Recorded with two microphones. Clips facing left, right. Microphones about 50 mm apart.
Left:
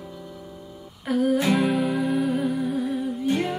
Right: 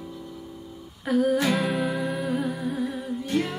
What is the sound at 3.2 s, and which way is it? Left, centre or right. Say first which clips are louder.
Music: left 1 dB; centre.